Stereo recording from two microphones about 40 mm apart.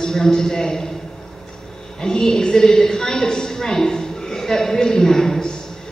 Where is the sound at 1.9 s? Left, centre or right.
Centre.